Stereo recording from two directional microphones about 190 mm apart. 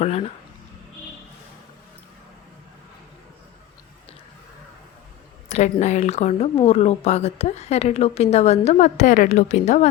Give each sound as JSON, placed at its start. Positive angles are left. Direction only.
{"t": 0.0, "sound": "a woman's voice", "side_deg": 35}
{"t": 5.5, "sound": "a woman's voice", "side_deg": 35}